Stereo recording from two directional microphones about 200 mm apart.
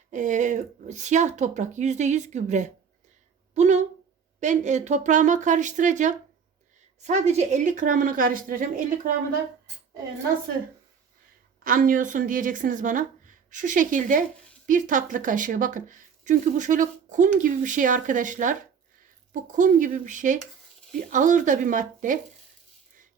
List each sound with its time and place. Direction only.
0.1 s a woman's voice: 40° right (ahead or behind)
11.6 s a woman's voice: 45° right (ahead or behind)